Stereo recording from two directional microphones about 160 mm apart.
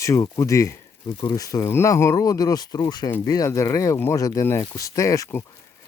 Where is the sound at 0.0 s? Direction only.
20° left (ahead or behind).